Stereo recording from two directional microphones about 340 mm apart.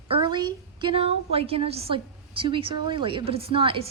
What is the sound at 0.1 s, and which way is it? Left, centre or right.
A woman's voice, centre.